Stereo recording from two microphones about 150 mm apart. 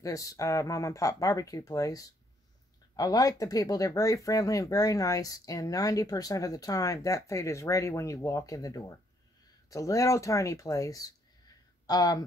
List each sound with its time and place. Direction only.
0.0 s speech: 25° left (ahead or behind)